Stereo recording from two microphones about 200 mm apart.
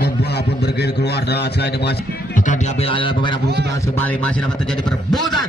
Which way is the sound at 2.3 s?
40° left (ahead or behind).